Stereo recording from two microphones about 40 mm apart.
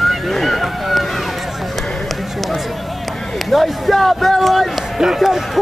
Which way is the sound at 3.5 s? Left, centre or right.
Centre.